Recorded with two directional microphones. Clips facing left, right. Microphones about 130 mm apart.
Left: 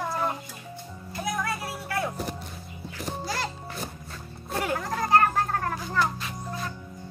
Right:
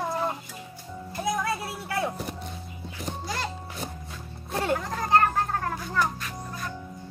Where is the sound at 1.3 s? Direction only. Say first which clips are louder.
Right 2 dB; 25° right (ahead or behind).